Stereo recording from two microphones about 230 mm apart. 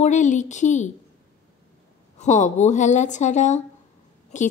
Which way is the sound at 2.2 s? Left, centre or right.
Left.